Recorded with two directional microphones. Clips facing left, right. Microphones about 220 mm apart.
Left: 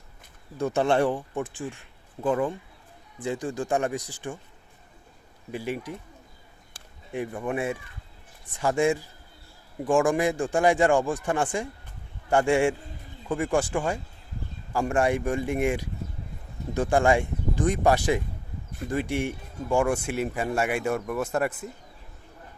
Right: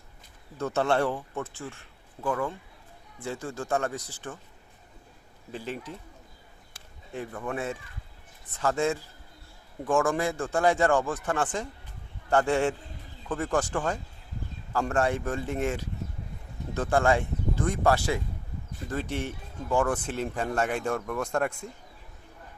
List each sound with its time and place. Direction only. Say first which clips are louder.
0.5 s speech: left 3 dB; 15° left (ahead or behind)
5.5 s speech: left 4 dB; 10° left (ahead or behind)
7.1 s speech: left 4 dB; 15° left (ahead or behind)